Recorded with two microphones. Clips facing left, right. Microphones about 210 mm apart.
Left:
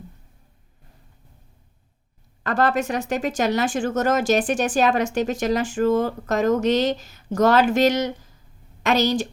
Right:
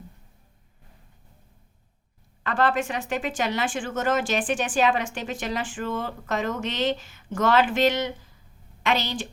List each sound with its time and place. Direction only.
2.4 s a woman's voice: 40° left (ahead or behind)